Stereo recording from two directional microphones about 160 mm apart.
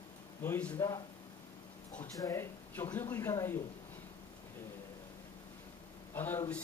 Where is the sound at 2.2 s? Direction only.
15° left (ahead or behind).